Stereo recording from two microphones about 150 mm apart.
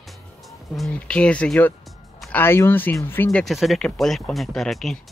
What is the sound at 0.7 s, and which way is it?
Speech, 5° left (ahead or behind).